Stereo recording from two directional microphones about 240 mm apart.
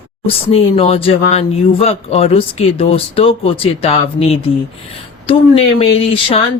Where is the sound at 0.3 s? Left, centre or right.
Left.